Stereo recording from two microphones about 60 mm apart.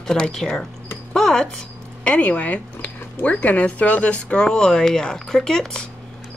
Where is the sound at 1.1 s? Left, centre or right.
Centre.